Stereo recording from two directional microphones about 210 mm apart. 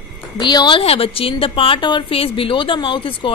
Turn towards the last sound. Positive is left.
turn(degrees=25)  # may be behind; listen again after turning